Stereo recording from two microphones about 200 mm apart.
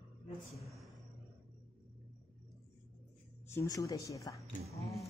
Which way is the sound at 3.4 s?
15° left (ahead or behind).